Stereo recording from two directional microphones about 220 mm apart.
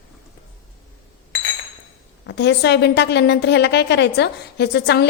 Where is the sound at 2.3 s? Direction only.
50° left (ahead or behind).